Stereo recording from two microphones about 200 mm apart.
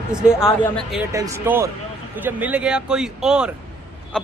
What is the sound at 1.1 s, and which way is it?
A man's voice, 15° right (ahead or behind).